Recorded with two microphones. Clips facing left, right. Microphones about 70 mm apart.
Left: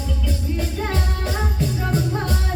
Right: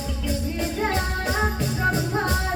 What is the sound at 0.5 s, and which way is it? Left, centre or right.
Music, right.